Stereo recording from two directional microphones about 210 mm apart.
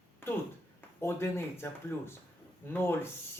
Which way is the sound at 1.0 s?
10° left (ahead or behind).